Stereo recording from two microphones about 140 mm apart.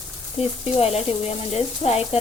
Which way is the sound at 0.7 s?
45° left (ahead or behind).